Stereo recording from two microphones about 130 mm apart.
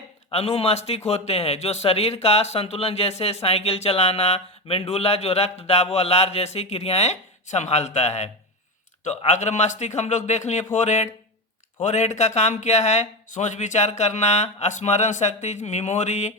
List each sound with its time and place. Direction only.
0.3 s a man's voice: 50° left (ahead or behind); by 16.3 s 65° left (ahead or behind)